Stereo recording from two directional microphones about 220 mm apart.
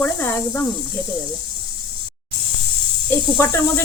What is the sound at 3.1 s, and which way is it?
Speech, 20° right (ahead or behind).